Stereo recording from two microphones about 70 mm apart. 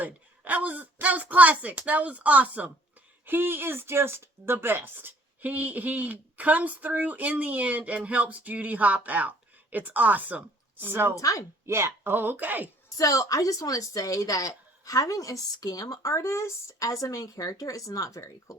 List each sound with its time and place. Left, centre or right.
0.0 s speech: right
11.1 s a woman's voice: left
11.6 s speech: right
13.0 s a woman's voice: left